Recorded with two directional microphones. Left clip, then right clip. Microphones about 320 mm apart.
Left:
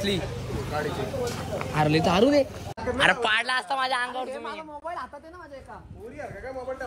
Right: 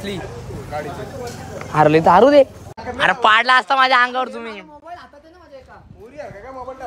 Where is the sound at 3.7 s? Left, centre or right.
Right.